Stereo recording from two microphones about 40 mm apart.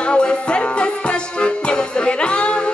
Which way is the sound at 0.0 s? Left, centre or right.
Left.